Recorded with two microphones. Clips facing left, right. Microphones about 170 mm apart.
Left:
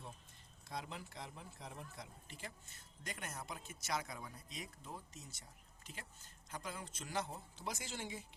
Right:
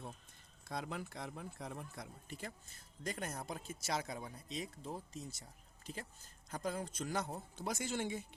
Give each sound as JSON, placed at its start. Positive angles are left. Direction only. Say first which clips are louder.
{"t": 0.7, "sound": "speech", "louder": "right 4 dB", "side_deg": -55}
{"t": 3.0, "sound": "speech", "louder": "right 6 dB", "side_deg": -35}